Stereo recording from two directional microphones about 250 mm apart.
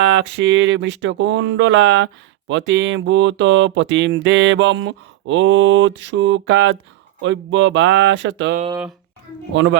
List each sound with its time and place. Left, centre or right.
0.1 s speech: right